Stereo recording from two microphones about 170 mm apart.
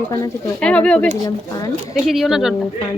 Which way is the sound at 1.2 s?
25° left (ahead or behind).